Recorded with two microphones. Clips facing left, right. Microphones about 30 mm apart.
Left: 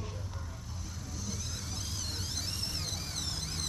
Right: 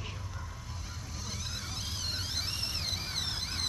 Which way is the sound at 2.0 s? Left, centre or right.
Right.